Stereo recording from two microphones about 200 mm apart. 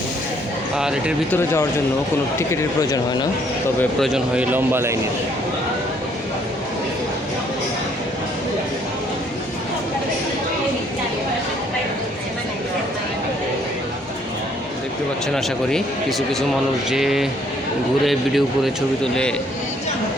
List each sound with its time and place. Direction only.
0.8 s speech: 5° right (ahead or behind)
1.3 s speech: 10° left (ahead or behind)
4.0 s speech: 5° right (ahead or behind)
15.7 s speech: centre (ahead or behind)